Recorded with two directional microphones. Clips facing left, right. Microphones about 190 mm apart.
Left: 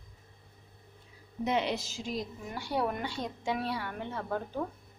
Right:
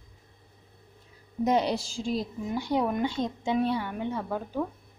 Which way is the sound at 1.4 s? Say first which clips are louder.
Right 5 dB; 40° right (ahead or behind).